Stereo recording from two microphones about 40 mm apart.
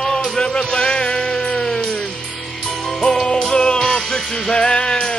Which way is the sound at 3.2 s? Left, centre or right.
Left.